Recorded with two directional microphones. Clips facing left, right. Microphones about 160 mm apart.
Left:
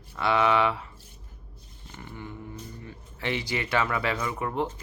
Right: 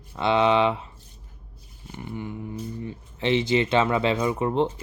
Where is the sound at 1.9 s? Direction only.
20° right (ahead or behind).